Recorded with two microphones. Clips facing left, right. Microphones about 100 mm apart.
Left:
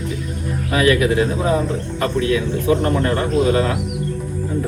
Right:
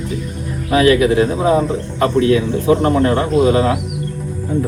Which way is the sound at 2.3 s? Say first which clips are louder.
Right 4 dB; 35° right (ahead or behind).